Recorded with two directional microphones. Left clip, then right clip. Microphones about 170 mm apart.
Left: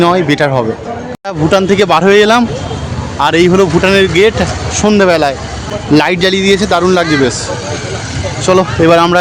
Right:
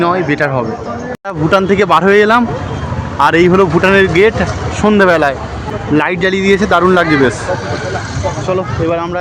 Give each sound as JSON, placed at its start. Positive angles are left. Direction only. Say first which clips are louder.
{"t": 0.0, "sound": "speech", "louder": "left 3 dB", "side_deg": 50}
{"t": 1.5, "sound": "a man's voice", "louder": "left 1 dB", "side_deg": 30}
{"t": 5.9, "sound": "speech", "louder": "left 3 dB", "side_deg": 40}
{"t": 8.4, "sound": "speech", "louder": "left 9 dB", "side_deg": 85}